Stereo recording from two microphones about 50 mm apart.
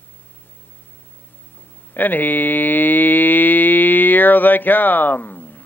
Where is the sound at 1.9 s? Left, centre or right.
Left.